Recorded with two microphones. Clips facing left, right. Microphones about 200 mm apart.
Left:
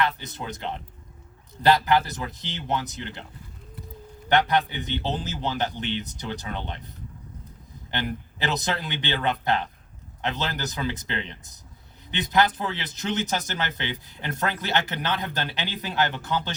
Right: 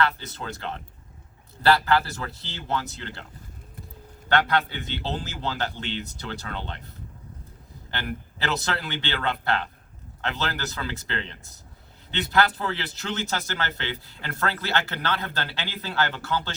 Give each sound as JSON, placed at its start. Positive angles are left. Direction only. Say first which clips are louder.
{"t": 0.0, "sound": "speech", "louder": "right 1 dB", "side_deg": 15}
{"t": 4.3, "sound": "speech", "louder": "left 1 dB", "side_deg": 15}